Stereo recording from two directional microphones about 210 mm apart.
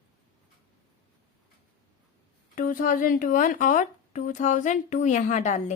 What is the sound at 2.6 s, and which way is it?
Speech, 40° left (ahead or behind).